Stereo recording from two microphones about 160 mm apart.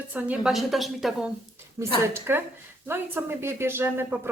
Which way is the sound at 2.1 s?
15° right (ahead or behind).